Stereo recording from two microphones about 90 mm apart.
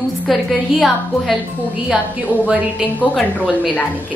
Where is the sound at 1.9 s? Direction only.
15° right (ahead or behind).